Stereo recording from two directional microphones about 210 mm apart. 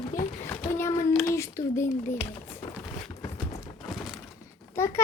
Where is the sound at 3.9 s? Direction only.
Centre (ahead or behind).